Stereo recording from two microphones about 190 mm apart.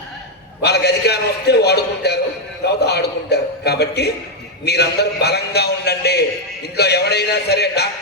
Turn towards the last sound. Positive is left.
turn(degrees=60)  # may be behind; listen again after turning